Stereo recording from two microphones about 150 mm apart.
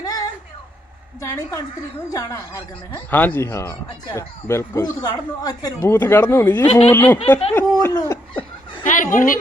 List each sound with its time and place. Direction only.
0.0 s a sound: 25° left (ahead or behind)
1.2 s speech: 20° left (ahead or behind)
6.7 s speech: 45° left (ahead or behind)
6.9 s speech: 15° left (ahead or behind)
7.5 s a sound: 20° left (ahead or behind)
8.8 s speech: 60° left (ahead or behind)